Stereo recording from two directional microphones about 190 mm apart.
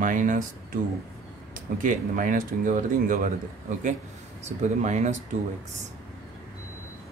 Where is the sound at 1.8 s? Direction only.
45° right (ahead or behind).